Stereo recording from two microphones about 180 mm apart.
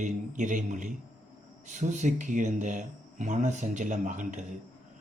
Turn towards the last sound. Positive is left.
turn(degrees=-40)  # may be behind; listen again after turning